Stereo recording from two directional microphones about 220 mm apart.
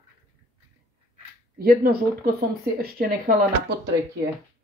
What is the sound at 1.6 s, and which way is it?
A woman's voice, 40° right (ahead or behind).